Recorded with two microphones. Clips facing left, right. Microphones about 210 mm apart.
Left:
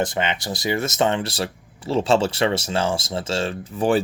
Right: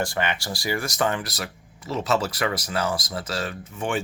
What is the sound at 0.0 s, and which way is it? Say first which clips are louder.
Speech: left 3 dB; 20° left (ahead or behind).